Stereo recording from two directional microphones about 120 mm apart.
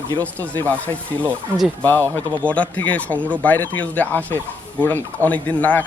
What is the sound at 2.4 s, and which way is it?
Speech, 10° left (ahead or behind).